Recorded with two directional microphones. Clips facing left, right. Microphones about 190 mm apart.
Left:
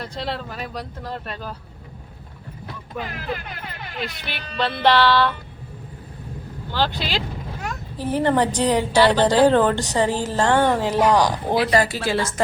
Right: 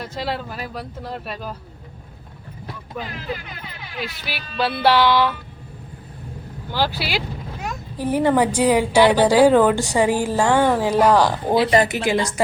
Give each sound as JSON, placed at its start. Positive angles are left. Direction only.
{"t": 0.0, "sound": "speech", "side_deg": -5}
{"t": 3.1, "sound": "speech", "side_deg": 50}
{"t": 4.0, "sound": "speech", "side_deg": -5}
{"t": 6.7, "sound": "speech", "side_deg": -10}
{"t": 11.1, "sound": "speech", "side_deg": 15}
{"t": 11.5, "sound": "a woman's voice", "side_deg": -25}